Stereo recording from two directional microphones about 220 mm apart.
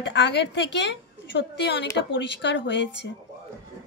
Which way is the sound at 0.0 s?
55° left (ahead or behind).